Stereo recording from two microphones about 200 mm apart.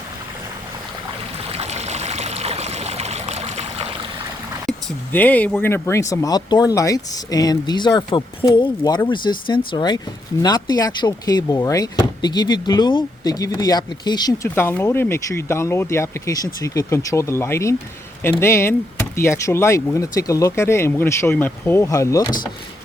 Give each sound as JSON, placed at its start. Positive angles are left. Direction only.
{"t": 1.5, "sound": "stream", "side_deg": -30}
{"t": 5.1, "sound": "speech", "side_deg": 10}